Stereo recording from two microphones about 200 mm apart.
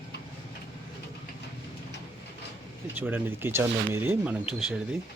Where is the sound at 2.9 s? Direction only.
10° right (ahead or behind).